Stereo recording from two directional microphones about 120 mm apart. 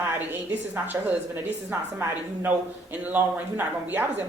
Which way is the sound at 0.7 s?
15° right (ahead or behind).